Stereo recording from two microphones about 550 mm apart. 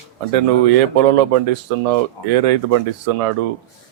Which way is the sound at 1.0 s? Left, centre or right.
Right.